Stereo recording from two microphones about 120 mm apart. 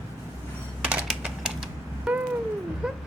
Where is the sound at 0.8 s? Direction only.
10° right (ahead or behind).